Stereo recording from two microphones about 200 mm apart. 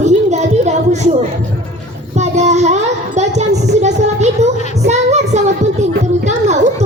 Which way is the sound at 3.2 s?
35° right (ahead or behind).